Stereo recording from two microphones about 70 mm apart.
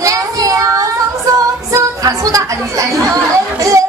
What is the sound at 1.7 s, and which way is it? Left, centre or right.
Chatter, right.